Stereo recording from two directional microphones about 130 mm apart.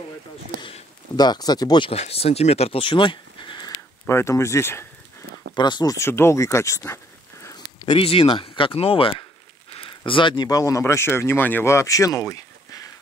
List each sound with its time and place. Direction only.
1.1 s speech: 30° left (ahead or behind)
1.9 s speech: 50° left (ahead or behind)
4.1 s speech: 20° left (ahead or behind)
5.5 s speech: 35° left (ahead or behind)
5.9 s speech: 20° left (ahead or behind)
7.4 s a sound: 30° left (ahead or behind)
8.0 s speech: 45° left (ahead or behind); by 12.9 s 25° left (ahead or behind)